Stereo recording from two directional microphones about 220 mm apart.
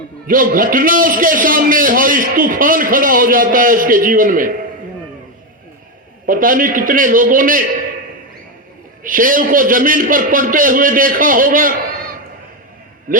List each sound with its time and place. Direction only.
0.3 s a man's voice: 40° right (ahead or behind)
6.2 s a man's voice: 40° right (ahead or behind)
9.0 s a man's voice: 40° right (ahead or behind)
13.1 s a man's voice: 40° right (ahead or behind)